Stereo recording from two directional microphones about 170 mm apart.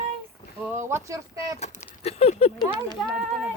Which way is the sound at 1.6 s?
35° left (ahead or behind).